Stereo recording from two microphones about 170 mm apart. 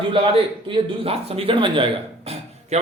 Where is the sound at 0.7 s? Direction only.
35° right (ahead or behind).